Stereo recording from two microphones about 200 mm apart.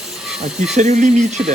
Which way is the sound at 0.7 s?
35° right (ahead or behind).